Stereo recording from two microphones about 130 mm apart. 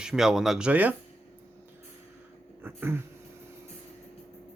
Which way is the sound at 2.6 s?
15° right (ahead or behind).